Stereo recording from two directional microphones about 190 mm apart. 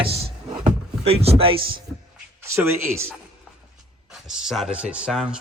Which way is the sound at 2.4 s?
15° right (ahead or behind).